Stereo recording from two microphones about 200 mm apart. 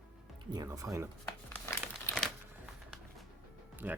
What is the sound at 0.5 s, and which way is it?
Speech, 15° right (ahead or behind).